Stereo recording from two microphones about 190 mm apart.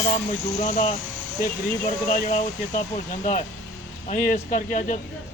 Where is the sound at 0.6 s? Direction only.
40° left (ahead or behind).